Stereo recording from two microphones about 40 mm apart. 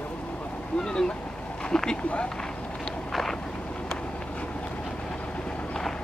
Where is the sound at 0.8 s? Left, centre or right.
Centre.